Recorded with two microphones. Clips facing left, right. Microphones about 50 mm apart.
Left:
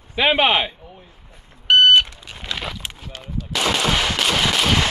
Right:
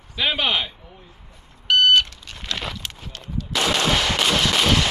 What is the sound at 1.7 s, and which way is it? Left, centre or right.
Smoke detector, left.